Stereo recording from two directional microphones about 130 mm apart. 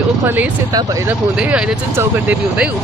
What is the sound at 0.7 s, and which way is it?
Speech, 30° right (ahead or behind).